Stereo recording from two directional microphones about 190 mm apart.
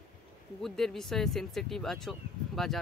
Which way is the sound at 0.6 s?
Centre (ahead or behind).